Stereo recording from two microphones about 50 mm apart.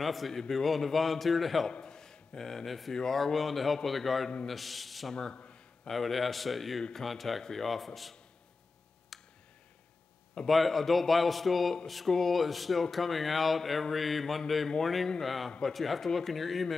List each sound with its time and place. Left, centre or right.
0.0 s a man's voice: centre
1.7 s a man's voice: centre
5.3 s a sound: left
5.9 s a man's voice: centre
9.1 s a sound: centre
10.4 s a man's voice: centre